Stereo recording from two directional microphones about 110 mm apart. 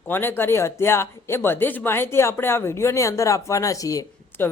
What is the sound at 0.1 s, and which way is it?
Speech, 20° left (ahead or behind).